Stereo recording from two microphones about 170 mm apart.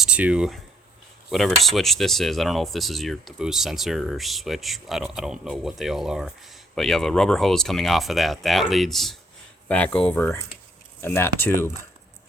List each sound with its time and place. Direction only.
0.0 s speech: 5° right (ahead or behind); by 11.7 s 15° left (ahead or behind)